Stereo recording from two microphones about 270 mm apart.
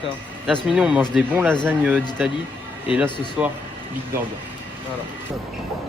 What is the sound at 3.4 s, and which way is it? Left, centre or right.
Speech, centre.